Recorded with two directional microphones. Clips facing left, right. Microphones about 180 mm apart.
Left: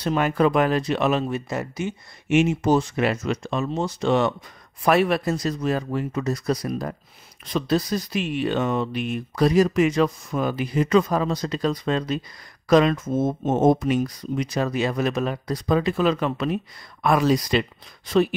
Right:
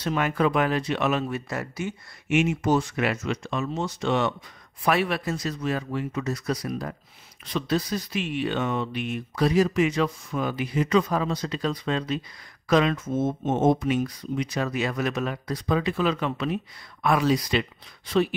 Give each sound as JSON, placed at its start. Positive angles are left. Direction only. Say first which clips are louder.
{"t": 0.0, "sound": "speech", "louder": "left 4 dB", "side_deg": 35}
{"t": 1.2, "sound": "speech", "louder": "left 3 dB", "side_deg": 20}